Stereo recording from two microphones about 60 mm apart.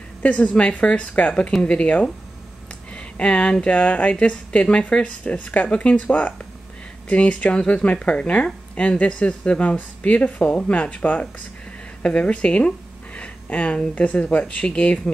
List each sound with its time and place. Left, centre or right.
0.2 s speech: centre
2.9 s a sound: centre
3.6 s speech: left